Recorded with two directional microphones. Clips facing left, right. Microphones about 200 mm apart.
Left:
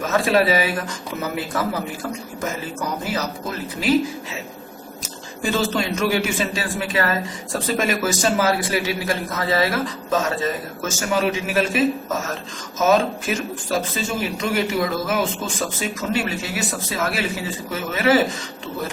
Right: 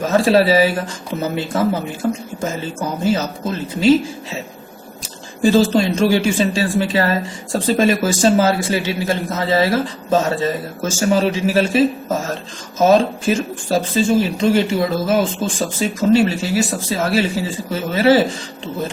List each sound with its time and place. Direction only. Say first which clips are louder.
0.0 s speech: right 5 dB; 30° right (ahead or behind)
5.4 s speech: right 8 dB; 30° right (ahead or behind)